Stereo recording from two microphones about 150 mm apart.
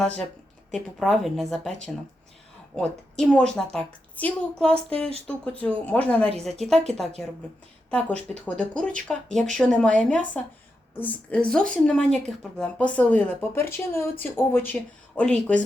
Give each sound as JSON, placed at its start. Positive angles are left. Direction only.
{"t": 0.7, "sound": "a woman's voice", "side_deg": 0}
{"t": 2.7, "sound": "a woman's voice", "side_deg": 5}
{"t": 7.9, "sound": "speech", "side_deg": 10}